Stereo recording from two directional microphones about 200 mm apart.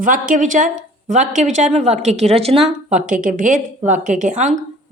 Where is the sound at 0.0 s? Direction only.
40° right (ahead or behind).